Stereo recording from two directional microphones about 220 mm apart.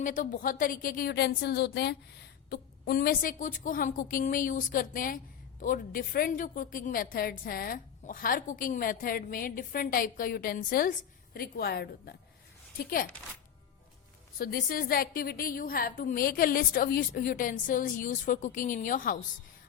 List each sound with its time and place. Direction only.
0.0 s a woman's voice: 35° left (ahead or behind)
14.3 s a woman's voice: 40° left (ahead or behind)